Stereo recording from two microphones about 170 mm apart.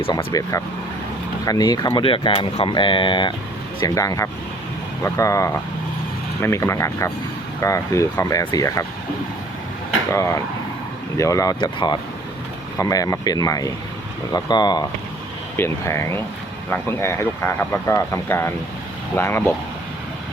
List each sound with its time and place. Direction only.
0.0 s speech: 30° left (ahead or behind)
1.5 s speech: 20° left (ahead or behind)
10.1 s speech: 20° left (ahead or behind)
15.5 s speech: 15° left (ahead or behind)